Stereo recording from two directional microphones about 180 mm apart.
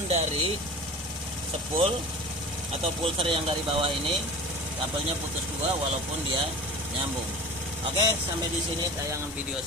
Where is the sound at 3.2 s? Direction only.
30° right (ahead or behind).